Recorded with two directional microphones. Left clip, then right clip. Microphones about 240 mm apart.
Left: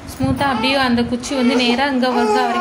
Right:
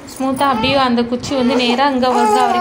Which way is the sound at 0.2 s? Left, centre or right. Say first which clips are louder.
Right 3 dB; centre.